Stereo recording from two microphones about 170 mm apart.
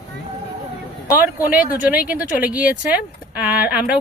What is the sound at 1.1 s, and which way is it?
Speech, 10° right (ahead or behind).